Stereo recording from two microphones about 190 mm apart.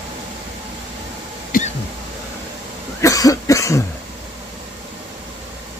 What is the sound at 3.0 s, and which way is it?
Cough, 15° left (ahead or behind).